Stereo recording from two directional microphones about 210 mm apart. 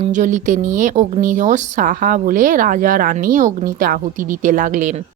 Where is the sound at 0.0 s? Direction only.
35° right (ahead or behind).